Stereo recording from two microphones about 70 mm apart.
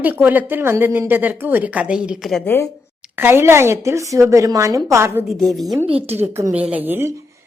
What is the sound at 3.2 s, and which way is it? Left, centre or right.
A woman's voice, right.